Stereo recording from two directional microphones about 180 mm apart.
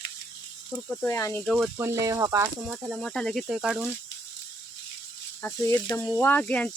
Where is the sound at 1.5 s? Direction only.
5° right (ahead or behind).